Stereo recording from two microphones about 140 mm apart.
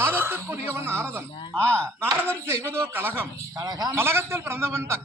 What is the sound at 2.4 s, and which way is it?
A man's voice, 15° right (ahead or behind).